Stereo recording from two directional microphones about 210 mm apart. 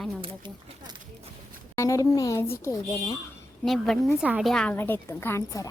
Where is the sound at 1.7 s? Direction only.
15° left (ahead or behind).